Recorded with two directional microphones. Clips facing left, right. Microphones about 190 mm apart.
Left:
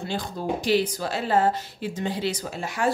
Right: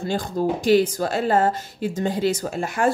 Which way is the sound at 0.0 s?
45° right (ahead or behind).